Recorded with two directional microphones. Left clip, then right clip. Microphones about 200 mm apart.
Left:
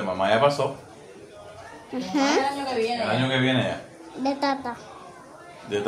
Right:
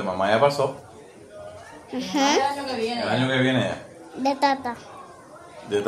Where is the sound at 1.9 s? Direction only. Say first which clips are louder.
Right 2 dB; 10° right (ahead or behind).